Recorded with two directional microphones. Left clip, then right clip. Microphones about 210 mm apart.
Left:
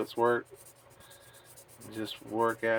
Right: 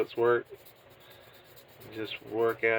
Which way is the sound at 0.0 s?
40° left (ahead or behind).